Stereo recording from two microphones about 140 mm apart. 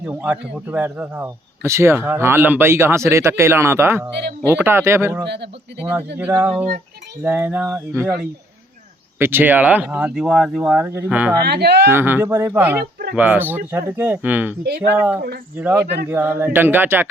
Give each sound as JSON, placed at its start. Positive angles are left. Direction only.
{"t": 0.0, "sound": "a man's voice", "side_deg": -10}
{"t": 9.1, "sound": "a man's voice", "side_deg": -15}
{"t": 10.8, "sound": "a man's voice", "side_deg": -15}